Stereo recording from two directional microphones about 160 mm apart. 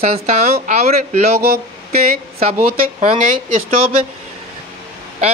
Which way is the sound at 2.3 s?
45° right (ahead or behind).